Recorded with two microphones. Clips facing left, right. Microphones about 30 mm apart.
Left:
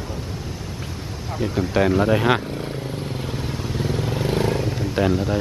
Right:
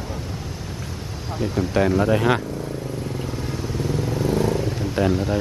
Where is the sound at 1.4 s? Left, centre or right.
Centre.